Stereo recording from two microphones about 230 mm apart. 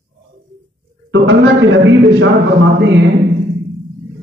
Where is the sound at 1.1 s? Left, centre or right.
Right.